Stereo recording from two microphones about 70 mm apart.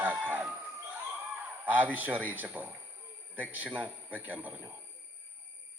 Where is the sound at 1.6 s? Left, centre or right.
Right.